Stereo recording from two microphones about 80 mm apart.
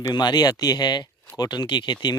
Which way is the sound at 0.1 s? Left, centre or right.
Left.